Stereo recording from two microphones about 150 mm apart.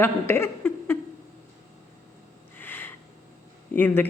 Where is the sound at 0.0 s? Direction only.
15° left (ahead or behind).